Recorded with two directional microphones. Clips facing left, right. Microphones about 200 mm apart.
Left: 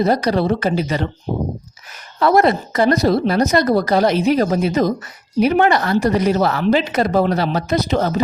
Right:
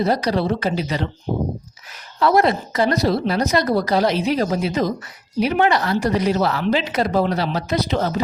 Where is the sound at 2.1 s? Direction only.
50° left (ahead or behind).